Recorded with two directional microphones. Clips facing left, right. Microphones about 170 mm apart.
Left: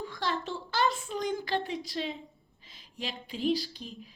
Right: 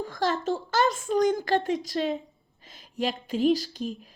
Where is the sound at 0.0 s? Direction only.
45° right (ahead or behind).